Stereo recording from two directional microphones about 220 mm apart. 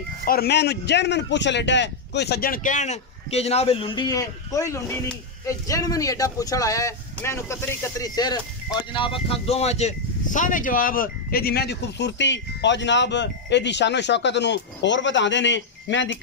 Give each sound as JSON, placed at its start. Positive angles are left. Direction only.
{"t": 0.2, "sound": "a man's voice", "side_deg": 45}